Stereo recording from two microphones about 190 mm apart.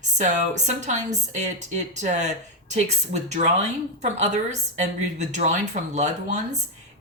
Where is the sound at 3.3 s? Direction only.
35° right (ahead or behind).